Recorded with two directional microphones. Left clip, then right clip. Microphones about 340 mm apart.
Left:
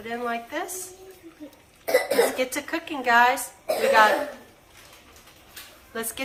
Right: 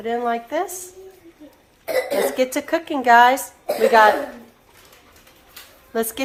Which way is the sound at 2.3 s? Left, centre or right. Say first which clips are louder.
Right 7 dB; right.